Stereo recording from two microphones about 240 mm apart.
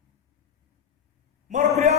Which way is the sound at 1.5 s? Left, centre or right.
Right.